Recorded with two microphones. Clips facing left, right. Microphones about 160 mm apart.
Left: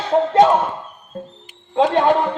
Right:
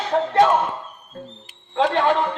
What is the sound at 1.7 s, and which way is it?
Speech, 20° left (ahead or behind).